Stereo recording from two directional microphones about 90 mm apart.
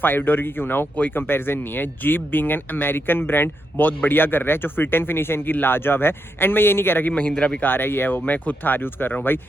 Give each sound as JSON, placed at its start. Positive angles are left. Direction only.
{"t": 0.0, "sound": "speech", "side_deg": 25}
{"t": 7.1, "sound": "a man's voice", "side_deg": 15}
{"t": 7.6, "sound": "speech", "side_deg": 25}